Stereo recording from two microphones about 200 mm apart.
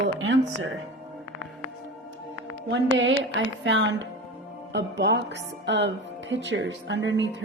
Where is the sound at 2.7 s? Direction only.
65° right (ahead or behind).